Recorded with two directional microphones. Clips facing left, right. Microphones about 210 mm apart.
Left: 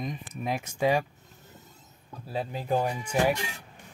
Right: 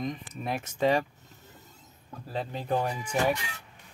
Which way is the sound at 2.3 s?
10° left (ahead or behind).